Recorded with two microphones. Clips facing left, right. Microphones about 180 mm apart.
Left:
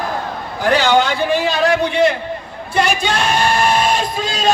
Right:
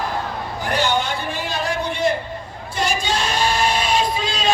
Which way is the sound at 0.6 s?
90° left.